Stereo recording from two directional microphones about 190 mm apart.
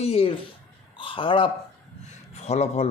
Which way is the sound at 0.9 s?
25° left (ahead or behind).